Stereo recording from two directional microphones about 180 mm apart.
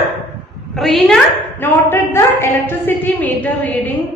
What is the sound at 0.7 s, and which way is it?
A woman's voice, centre (ahead or behind).